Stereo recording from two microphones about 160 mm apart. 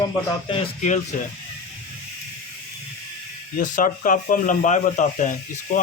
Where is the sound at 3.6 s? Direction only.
50° left (ahead or behind).